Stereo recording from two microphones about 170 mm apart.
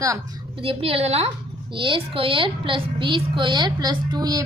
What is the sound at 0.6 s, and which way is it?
A woman's voice, 35° right (ahead or behind).